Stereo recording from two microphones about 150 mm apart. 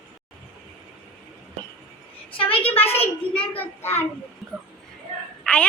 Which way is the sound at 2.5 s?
10° left (ahead or behind).